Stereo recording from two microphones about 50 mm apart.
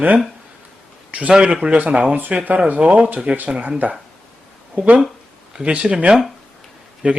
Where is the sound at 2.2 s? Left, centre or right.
Right.